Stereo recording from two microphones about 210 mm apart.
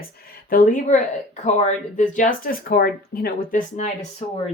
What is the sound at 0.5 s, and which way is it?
Speech, 40° left (ahead or behind).